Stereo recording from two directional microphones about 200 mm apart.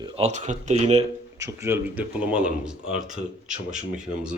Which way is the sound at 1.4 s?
15° right (ahead or behind).